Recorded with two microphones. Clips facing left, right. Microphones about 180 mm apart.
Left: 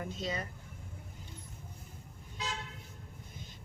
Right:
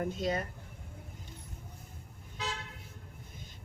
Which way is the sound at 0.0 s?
50° right (ahead or behind).